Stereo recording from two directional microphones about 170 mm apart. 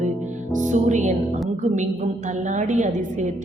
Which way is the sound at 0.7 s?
45° right (ahead or behind).